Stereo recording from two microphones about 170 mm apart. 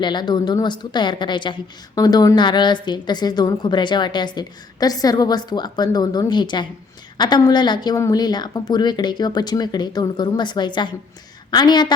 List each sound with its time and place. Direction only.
0.0 s a woman's voice: 25° left (ahead or behind)